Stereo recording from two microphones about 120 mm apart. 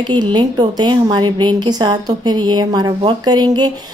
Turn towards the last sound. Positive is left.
turn(degrees=-35)  # may be behind; listen again after turning